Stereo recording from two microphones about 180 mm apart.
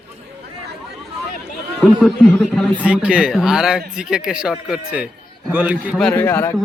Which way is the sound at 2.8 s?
5° right (ahead or behind).